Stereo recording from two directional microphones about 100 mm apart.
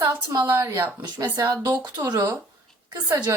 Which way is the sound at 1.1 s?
40° right (ahead or behind).